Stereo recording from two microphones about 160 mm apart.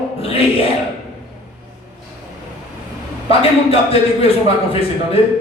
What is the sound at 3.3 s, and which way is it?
A man's voice, 35° left (ahead or behind).